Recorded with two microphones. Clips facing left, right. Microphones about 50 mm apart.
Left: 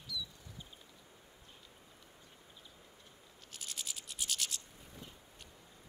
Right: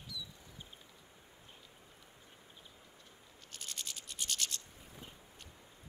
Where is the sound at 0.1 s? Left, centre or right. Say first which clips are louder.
Left 4 dB; right.